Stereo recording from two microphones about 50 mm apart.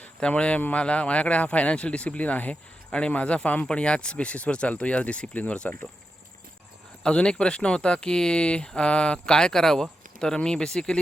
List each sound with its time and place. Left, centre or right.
0.2 s speech: left
7.0 s speech: centre